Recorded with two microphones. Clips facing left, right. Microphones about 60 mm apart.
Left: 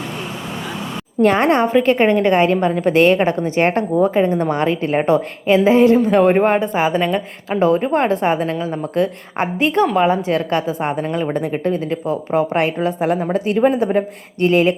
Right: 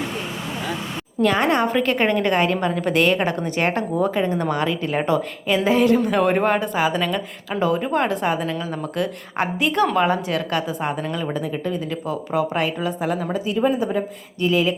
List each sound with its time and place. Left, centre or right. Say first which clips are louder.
1.2 s a woman's voice: left 5 dB; left
1.6 s a woman's voice: left 5 dB; left
9.8 s a woman's voice: left 2 dB; centre; by 14.8 s left